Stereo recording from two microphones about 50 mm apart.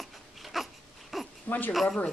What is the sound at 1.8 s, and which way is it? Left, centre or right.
Speech, centre.